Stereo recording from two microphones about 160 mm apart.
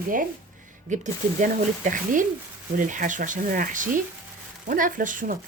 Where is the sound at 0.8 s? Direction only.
50° right (ahead or behind).